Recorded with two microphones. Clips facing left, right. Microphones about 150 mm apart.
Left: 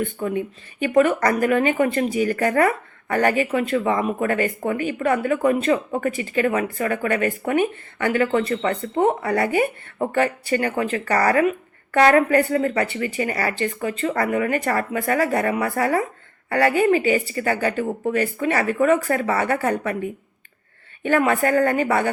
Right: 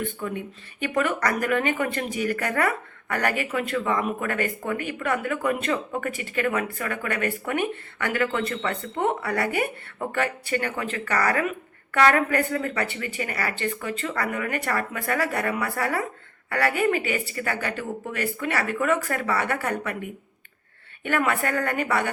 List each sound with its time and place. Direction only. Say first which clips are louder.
0.0 s speech: left 6 dB; 45° left (ahead or behind)
21.0 s speech: left 6 dB; 35° left (ahead or behind)